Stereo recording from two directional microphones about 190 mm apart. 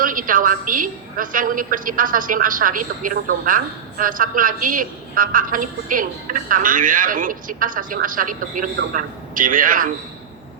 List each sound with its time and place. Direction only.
0.0 s a woman's voice: 45° right (ahead or behind)